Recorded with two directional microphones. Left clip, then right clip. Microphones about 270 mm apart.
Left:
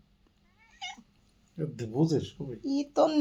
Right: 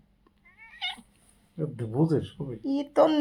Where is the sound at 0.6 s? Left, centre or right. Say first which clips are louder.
Right 7 dB; centre.